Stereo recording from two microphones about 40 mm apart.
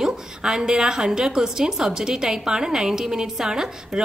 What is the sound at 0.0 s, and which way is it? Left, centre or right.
A woman's voice, centre.